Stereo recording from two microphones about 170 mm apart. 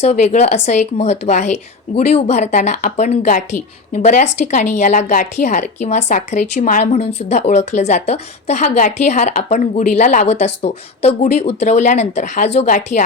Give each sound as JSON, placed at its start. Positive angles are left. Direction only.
{"t": 0.0, "sound": "speech", "side_deg": 40}